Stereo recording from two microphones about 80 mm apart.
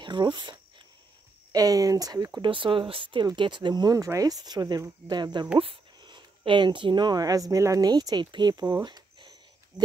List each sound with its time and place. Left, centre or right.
0.0 s a sound: right
1.5 s speech: right
2.3 s speech: right
3.3 s speech: right
3.9 s speech: right
6.0 s speech: right
7.9 s speech: right
8.8 s a sound: right